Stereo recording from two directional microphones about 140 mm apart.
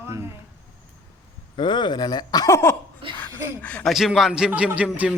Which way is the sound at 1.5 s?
35° left (ahead or behind).